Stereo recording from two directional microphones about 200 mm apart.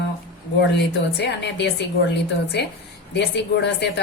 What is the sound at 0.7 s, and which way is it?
A woman's voice, 60° left (ahead or behind).